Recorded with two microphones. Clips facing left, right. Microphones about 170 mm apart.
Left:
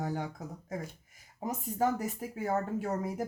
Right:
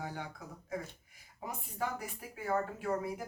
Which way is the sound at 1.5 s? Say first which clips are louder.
Left 8 dB; 45° left (ahead or behind).